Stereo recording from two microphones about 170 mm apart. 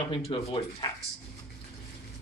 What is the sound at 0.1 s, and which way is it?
Speech, 30° left (ahead or behind).